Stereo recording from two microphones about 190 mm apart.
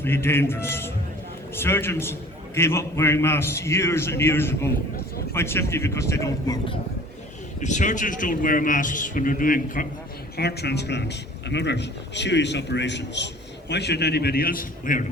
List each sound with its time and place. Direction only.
0.0 s a man's voice: 10° left (ahead or behind)
7.6 s a man's voice: 40° left (ahead or behind)
10.3 s a man's voice: 60° left (ahead or behind)